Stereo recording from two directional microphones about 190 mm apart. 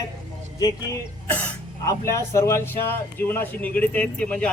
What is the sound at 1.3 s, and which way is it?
Speech, 10° left (ahead or behind).